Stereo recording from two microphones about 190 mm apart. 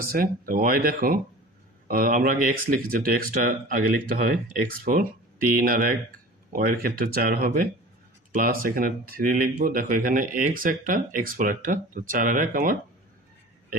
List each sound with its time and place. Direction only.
0.0 s speech: 50° right (ahead or behind)